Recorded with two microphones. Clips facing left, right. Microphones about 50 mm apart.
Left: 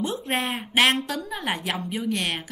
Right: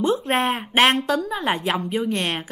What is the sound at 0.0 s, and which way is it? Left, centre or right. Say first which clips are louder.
A woman's voice: right 6 dB; right.